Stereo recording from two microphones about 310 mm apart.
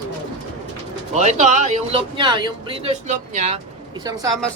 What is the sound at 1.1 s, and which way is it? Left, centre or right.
Speech, right.